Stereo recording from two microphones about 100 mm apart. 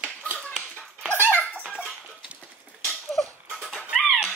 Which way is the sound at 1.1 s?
20° right (ahead or behind).